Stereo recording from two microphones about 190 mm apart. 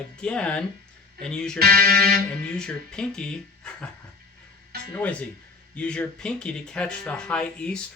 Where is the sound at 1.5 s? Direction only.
55° right (ahead or behind).